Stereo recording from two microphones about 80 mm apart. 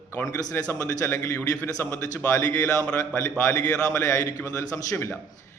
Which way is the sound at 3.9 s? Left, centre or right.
Left.